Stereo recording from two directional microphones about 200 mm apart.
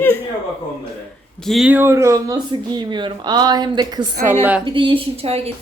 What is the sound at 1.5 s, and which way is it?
A woman's voice, 5° right (ahead or behind).